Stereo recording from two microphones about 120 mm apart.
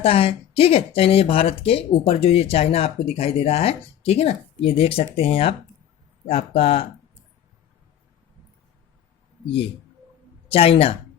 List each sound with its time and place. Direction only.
0.0 s speech: 55° left (ahead or behind)
10.5 s speech: 55° left (ahead or behind)